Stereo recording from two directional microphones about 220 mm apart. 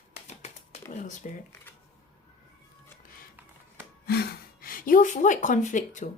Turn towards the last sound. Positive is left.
turn(degrees=35)  # may be behind; listen again after turning